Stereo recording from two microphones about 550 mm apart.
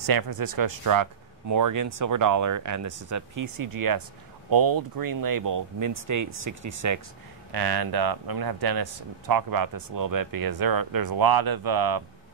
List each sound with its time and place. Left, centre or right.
0.0 s a man's voice: right
7.5 s a man's voice: right